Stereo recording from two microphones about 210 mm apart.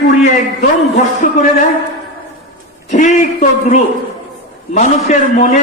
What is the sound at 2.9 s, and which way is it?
A man's voice, 35° left (ahead or behind).